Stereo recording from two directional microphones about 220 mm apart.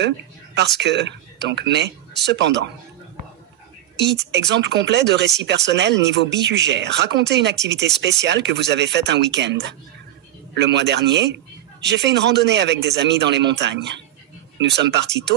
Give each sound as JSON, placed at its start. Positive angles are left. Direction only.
{"t": 0.6, "sound": "a man's voice", "side_deg": -50}
{"t": 4.0, "sound": "a man's voice", "side_deg": -50}